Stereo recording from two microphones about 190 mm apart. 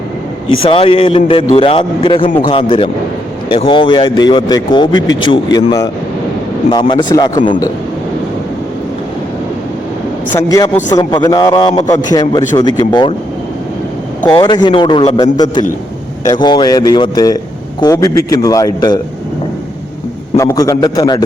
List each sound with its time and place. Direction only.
0.6 s a man's voice: 30° left (ahead or behind)
10.3 s a man's voice: 20° left (ahead or behind)
14.3 s a man's voice: 25° left (ahead or behind)
20.3 s a man's voice: 15° left (ahead or behind)